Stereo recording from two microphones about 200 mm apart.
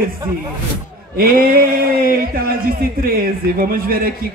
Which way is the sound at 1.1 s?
45° right (ahead or behind).